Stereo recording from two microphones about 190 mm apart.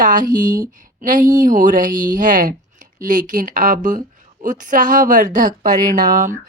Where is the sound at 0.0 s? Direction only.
45° right (ahead or behind).